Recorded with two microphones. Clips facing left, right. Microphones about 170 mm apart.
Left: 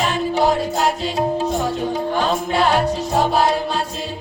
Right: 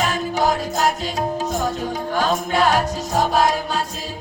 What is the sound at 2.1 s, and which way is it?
Music, 30° left (ahead or behind).